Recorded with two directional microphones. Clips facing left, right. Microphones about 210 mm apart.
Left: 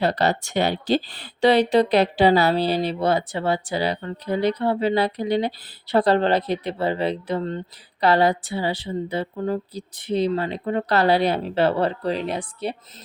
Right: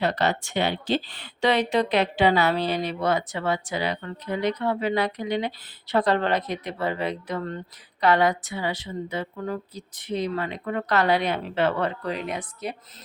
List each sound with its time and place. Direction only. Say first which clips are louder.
0.0 s speech: left 3 dB; 35° left (ahead or behind)